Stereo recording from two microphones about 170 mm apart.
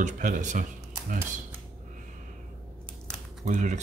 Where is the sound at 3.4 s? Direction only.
45° right (ahead or behind).